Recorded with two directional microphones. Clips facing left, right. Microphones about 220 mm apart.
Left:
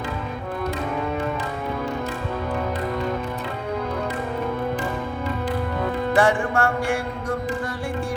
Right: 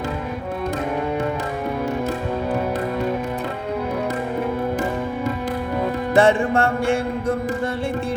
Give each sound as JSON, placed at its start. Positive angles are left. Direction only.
{"t": 6.1, "sound": "music", "side_deg": -25}